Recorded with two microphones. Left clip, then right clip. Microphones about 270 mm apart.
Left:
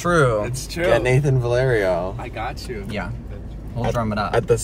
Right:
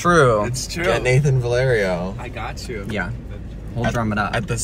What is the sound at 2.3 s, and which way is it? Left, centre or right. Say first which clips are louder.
A man's voice: left 1 dB; centre.